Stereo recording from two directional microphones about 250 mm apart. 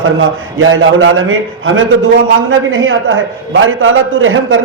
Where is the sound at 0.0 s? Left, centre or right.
Right.